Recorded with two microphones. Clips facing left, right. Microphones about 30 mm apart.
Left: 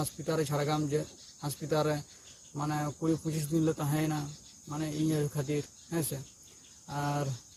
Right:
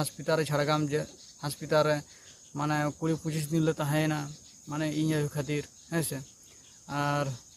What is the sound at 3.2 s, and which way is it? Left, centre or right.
Speech, right.